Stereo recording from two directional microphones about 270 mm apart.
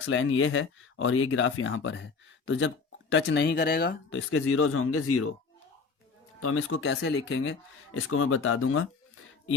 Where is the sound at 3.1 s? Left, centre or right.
Left.